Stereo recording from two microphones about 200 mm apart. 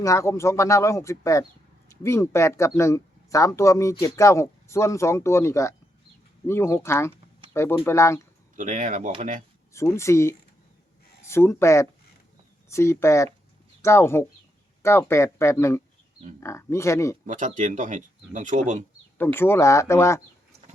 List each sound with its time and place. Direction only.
0.0 s speech: 15° left (ahead or behind)
8.5 s speech: 40° right (ahead or behind)
9.7 s speech: 15° left (ahead or behind)
17.2 s speech: 40° right (ahead or behind)
19.1 s speech: 10° left (ahead or behind)